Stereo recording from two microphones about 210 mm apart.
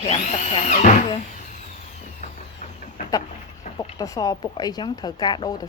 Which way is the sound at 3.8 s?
15° left (ahead or behind).